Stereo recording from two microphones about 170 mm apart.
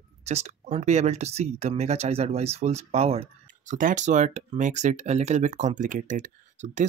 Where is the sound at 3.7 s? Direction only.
50° right (ahead or behind).